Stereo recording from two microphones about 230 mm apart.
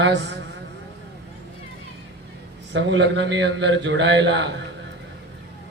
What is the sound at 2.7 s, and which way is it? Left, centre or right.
A man's voice, right.